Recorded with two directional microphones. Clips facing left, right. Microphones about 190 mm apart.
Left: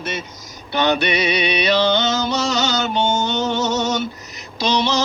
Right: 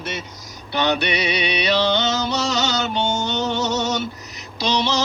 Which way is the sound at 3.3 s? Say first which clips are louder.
Left 2 dB; 50° left (ahead or behind).